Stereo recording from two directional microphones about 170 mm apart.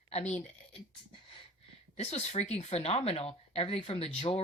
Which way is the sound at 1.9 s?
40° left (ahead or behind).